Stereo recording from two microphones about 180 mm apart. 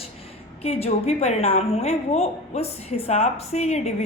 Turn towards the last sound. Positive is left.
turn(degrees=35)  # may be behind; listen again after turning